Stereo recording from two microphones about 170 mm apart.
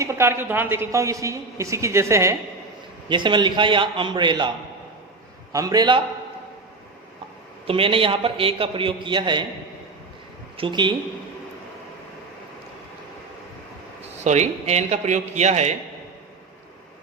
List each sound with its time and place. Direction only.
0.0 s a woman's voice: 15° right (ahead or behind)
3.1 s a man's voice: 30° right (ahead or behind)
5.5 s a man's voice: 20° right (ahead or behind)
7.7 s a man's voice: 30° right (ahead or behind)
10.6 s a man's voice: 25° right (ahead or behind)
14.3 s a man's voice: 40° right (ahead or behind)